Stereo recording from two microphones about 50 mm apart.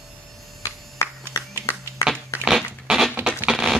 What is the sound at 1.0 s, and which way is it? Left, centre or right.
Clapping, left.